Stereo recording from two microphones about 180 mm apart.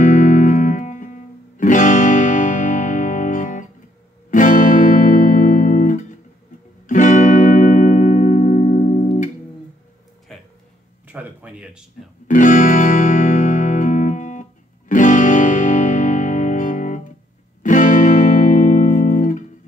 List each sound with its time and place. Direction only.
0.0 s music: 45° left (ahead or behind)
10.3 s a sound: centre (ahead or behind)
12.3 s music: 45° left (ahead or behind)